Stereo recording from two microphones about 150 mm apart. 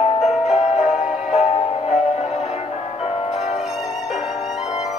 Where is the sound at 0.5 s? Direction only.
50° left (ahead or behind).